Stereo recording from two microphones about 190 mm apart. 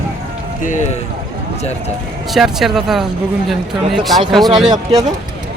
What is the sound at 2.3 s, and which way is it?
Speech, centre (ahead or behind).